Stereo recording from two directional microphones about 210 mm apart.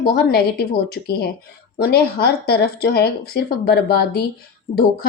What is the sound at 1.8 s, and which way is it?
Speech, 50° left (ahead or behind).